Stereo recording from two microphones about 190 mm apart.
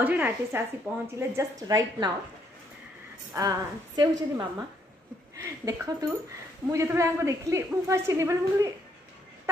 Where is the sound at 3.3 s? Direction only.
20° right (ahead or behind).